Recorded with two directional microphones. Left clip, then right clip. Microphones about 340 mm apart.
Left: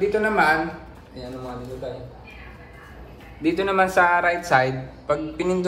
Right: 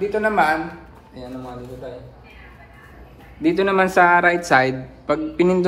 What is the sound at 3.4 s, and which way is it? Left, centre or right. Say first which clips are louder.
Speech: right 3 dB; centre.